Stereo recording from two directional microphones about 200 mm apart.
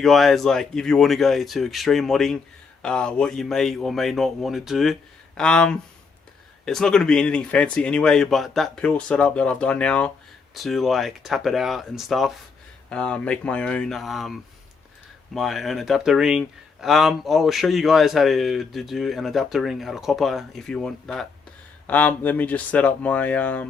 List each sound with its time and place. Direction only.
0.0 s a man's voice: centre (ahead or behind)